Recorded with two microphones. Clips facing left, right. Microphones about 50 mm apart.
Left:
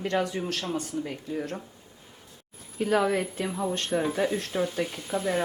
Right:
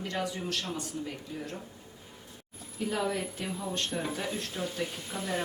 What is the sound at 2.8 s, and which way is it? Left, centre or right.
Speech, left.